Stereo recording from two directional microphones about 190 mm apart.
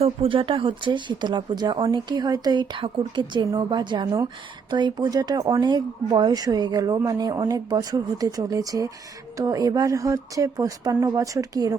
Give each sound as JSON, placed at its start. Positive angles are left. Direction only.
{"t": 0.0, "sound": "speech", "side_deg": -30}